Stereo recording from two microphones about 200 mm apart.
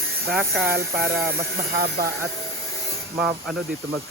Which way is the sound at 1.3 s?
50° right (ahead or behind).